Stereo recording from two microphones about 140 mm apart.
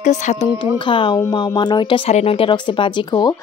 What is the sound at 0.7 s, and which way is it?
A woman's voice, 35° left (ahead or behind).